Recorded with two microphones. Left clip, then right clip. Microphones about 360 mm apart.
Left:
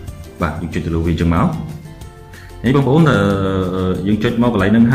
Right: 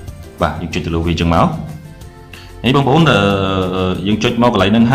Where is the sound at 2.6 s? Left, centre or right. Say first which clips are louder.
Right 2 dB; centre.